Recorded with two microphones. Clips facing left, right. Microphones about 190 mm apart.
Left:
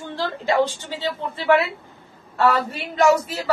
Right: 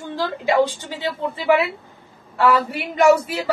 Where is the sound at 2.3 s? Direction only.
15° right (ahead or behind).